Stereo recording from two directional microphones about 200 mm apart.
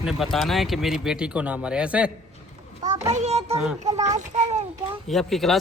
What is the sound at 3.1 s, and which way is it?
A child's voice, 35° right (ahead or behind).